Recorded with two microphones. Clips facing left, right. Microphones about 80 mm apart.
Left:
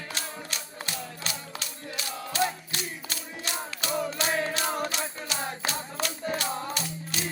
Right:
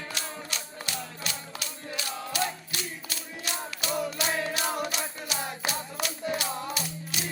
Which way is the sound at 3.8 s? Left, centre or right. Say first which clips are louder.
Left 1 dB; left.